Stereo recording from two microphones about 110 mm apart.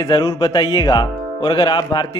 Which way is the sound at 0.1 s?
35° left (ahead or behind).